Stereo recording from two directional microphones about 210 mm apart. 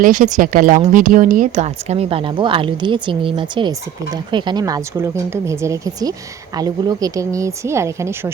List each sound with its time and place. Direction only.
0.0 s a woman's voice: 40° right (ahead or behind); by 8.3 s 15° right (ahead or behind)